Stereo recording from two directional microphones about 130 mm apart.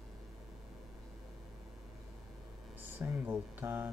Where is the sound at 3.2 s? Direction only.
15° right (ahead or behind).